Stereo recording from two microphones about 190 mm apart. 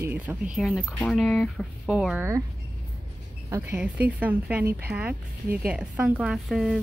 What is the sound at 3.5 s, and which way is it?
Speech, 15° right (ahead or behind).